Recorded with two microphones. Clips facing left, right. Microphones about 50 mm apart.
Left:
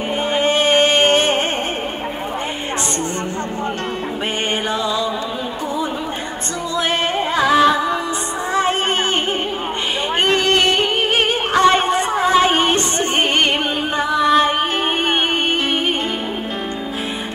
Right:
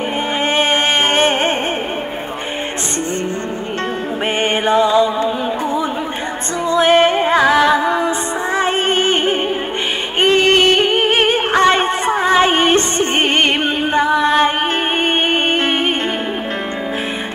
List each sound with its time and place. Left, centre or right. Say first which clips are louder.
0.5 s a sound: left 1 dB; right
4.6 s music: right 8 dB; right
6.7 s music: right 8 dB; right